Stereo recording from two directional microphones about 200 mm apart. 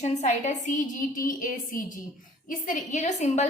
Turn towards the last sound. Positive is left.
turn(degrees=35)  # may be behind; listen again after turning